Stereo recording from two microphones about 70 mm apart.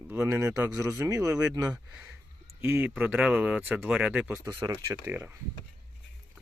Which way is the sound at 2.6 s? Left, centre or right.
Right.